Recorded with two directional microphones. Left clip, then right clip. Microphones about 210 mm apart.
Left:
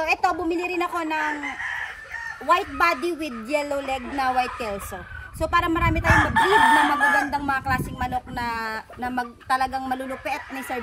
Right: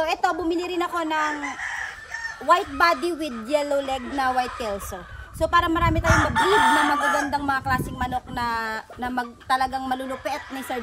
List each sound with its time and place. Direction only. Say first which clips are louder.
0.0 s speech: left 1 dB; centre (ahead or behind)
2.4 s speech: right 1 dB; 5° right (ahead or behind)
6.2 s chicken: left 1 dB; 15° left (ahead or behind)
7.2 s speech: even; 5° right (ahead or behind)